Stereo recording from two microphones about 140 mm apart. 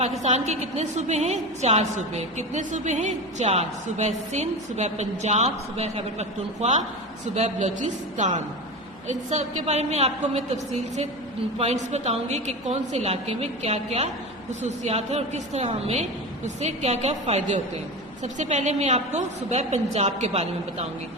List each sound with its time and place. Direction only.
0.2 s a woman's voice: 50° right (ahead or behind)
11.5 s a woman's voice: 50° right (ahead or behind)